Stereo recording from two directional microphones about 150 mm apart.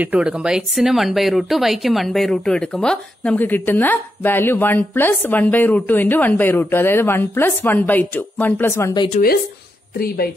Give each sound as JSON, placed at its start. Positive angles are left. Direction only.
{"t": 0.0, "sound": "speech", "side_deg": -10}
{"t": 9.9, "sound": "speech", "side_deg": 90}